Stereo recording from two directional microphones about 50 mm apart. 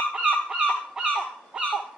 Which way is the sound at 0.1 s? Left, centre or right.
Right.